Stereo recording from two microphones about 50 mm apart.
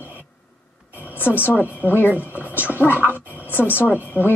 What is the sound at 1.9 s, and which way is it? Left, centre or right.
Speech, left.